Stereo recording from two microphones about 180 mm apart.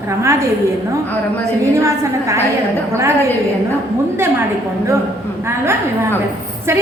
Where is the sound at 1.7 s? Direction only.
15° right (ahead or behind).